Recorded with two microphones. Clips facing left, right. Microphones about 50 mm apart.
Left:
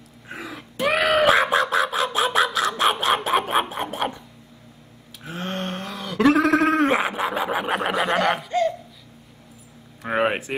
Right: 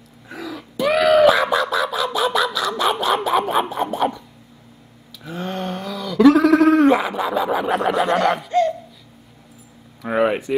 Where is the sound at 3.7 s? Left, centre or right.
Left.